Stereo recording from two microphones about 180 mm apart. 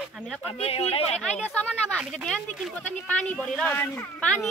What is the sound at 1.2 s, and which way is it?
Speech, 5° left (ahead or behind).